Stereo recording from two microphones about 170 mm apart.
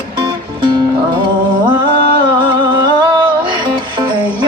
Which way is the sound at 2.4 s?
25° right (ahead or behind).